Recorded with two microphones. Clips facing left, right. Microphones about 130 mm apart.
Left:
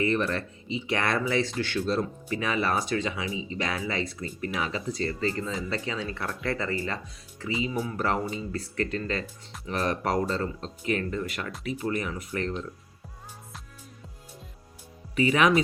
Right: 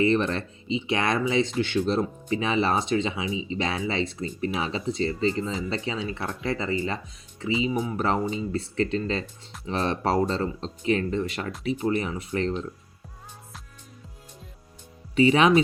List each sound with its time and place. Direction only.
0.0 s speech: 25° right (ahead or behind)
15.1 s speech: 25° right (ahead or behind)